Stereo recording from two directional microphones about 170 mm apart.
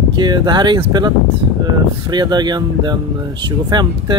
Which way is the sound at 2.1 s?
25° right (ahead or behind).